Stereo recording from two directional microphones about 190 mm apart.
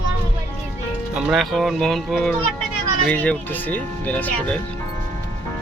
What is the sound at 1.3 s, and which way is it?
Speech, centre (ahead or behind).